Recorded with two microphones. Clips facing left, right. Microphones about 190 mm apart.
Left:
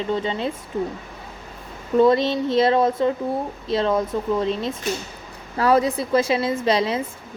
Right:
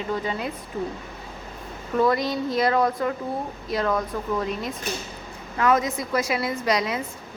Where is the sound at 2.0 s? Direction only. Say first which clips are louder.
Left 5 dB; 25° left (ahead or behind).